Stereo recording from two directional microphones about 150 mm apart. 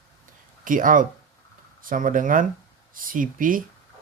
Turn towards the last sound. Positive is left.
turn(degrees=-65)  # may be behind; listen again after turning